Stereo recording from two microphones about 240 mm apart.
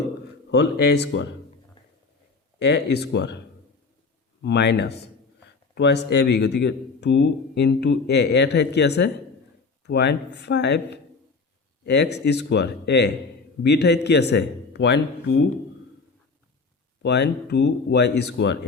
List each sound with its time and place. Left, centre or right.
0.5 s speech: left
2.6 s speech: left
12.1 s speech: left
17.0 s speech: left